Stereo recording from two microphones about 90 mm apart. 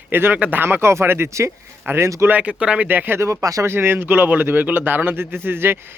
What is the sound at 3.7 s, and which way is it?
A man's voice, 25° right (ahead or behind).